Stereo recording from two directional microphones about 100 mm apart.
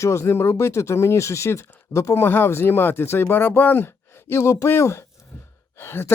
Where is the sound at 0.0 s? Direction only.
30° left (ahead or behind).